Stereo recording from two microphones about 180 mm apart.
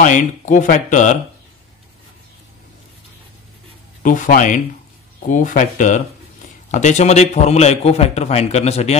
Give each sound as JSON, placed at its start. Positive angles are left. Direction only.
{"t": 0.0, "sound": "speech", "side_deg": 45}
{"t": 4.0, "sound": "a man's voice", "side_deg": 45}